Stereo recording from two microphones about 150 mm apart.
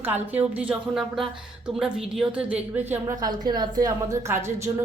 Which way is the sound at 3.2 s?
25° right (ahead or behind).